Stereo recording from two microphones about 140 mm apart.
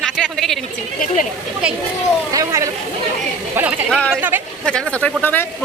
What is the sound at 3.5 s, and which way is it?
Speech, 10° right (ahead or behind).